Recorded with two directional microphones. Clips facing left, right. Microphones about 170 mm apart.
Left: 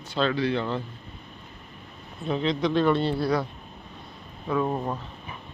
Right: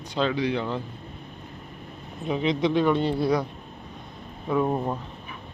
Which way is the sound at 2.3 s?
15° right (ahead or behind).